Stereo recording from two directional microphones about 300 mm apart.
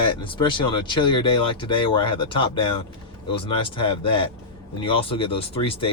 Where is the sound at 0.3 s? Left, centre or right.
Centre.